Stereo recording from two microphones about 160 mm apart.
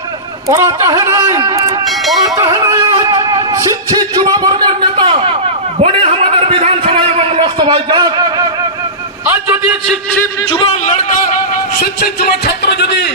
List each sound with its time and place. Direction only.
0.5 s speech: 20° right (ahead or behind)
2.7 s music: 25° right (ahead or behind)
4.1 s a man's voice: 25° right (ahead or behind)
9.2 s a man's voice: 10° right (ahead or behind)
12.5 s speech: 90° left